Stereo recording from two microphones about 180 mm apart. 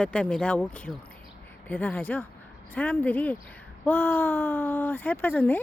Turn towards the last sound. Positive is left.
turn(degrees=10)  # may be behind; listen again after turning